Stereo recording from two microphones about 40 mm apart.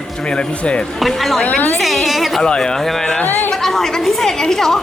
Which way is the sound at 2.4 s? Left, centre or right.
Centre.